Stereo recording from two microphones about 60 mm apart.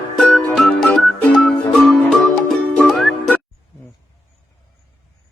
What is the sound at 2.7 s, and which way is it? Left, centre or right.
Music, centre.